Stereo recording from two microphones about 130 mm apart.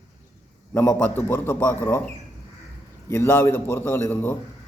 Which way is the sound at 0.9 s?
15° left (ahead or behind).